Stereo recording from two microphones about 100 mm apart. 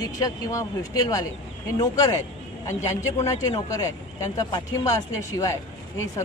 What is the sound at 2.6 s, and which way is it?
Speech, 30° left (ahead or behind).